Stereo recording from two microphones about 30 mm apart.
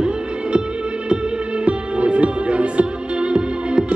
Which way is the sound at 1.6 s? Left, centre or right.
Right.